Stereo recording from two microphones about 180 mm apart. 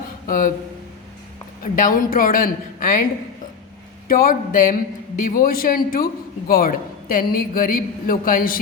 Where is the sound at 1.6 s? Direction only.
50° left (ahead or behind).